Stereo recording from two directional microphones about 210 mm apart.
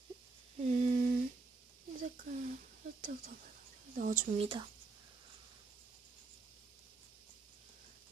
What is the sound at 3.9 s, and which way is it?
Speech, 40° right (ahead or behind).